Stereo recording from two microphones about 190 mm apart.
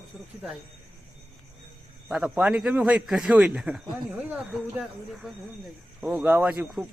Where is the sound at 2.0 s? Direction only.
5° right (ahead or behind).